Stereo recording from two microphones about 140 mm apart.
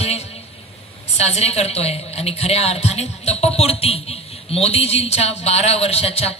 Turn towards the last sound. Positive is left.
turn(degrees=45)  # may be behind; listen again after turning